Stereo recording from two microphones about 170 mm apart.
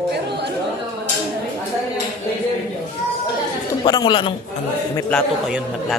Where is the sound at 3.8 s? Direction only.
25° left (ahead or behind).